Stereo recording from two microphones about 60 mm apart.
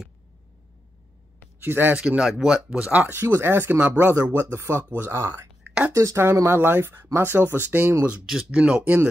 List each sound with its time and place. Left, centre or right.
1.6 s speech: right
2.0 s speech: centre
2.8 s speech: right
3.2 s speech: right
4.0 s speech: right
6.4 s speech: right
8.5 s speech: centre
8.8 s speech: right